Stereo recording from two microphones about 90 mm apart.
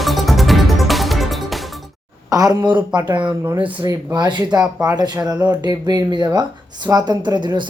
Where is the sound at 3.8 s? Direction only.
50° right (ahead or behind).